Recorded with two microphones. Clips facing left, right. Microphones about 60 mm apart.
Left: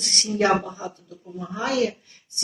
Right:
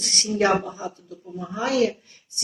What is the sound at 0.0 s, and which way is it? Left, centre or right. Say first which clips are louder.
Speech: even; centre.